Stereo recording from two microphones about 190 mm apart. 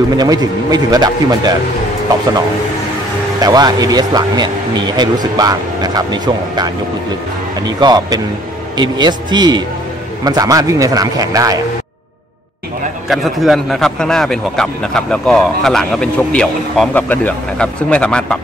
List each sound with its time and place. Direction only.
0.2 s speech: 20° right (ahead or behind)
3.3 s speech: 20° right (ahead or behind)
13.1 s a man's voice: centre (ahead or behind)